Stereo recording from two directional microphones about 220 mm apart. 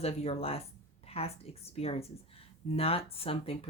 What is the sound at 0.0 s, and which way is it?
Speech, 30° left (ahead or behind).